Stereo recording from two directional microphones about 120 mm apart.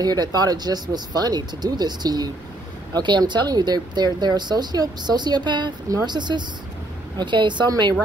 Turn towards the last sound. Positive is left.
turn(degrees=-40)  # may be behind; listen again after turning